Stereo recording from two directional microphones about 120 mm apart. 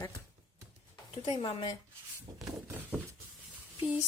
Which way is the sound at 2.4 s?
30° right (ahead or behind).